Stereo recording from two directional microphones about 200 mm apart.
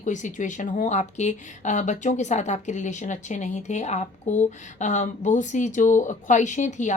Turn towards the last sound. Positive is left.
turn(degrees=35)  # may be behind; listen again after turning